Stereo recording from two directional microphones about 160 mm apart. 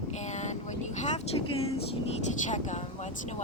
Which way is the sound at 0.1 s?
45° left (ahead or behind).